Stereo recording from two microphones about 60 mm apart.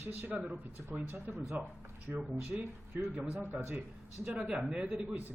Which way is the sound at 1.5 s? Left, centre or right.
Right.